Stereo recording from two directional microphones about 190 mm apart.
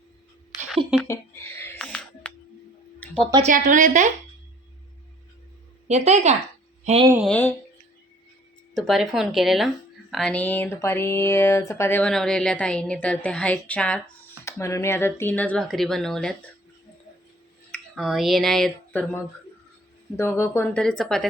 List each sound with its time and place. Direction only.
1.0 s a sound: 15° left (ahead or behind)
3.4 s speech: 40° right (ahead or behind)
5.9 s speech: 35° right (ahead or behind)
7.3 s speech: 10° left (ahead or behind)
8.7 s speech: centre (ahead or behind)
17.7 s speech: centre (ahead or behind)